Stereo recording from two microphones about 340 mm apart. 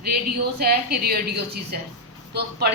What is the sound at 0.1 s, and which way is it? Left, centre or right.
A woman's voice, right.